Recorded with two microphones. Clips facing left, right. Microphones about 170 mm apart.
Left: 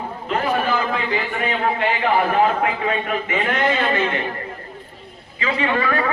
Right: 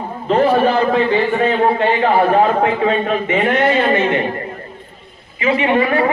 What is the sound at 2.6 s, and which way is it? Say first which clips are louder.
A man's voice: right 6 dB; 30° right (ahead or behind).